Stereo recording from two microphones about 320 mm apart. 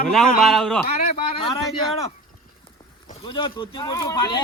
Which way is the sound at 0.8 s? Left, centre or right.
Left.